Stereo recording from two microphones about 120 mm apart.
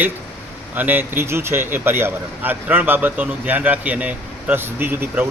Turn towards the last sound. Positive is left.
turn(degrees=-15)  # may be behind; listen again after turning